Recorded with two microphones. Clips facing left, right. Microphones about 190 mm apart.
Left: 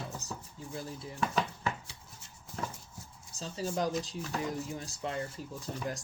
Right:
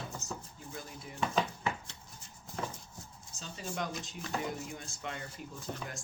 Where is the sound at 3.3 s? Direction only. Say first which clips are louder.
Left 6 dB; 35° left (ahead or behind).